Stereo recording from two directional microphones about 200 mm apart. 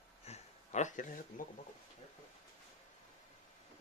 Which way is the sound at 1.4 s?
45° left (ahead or behind).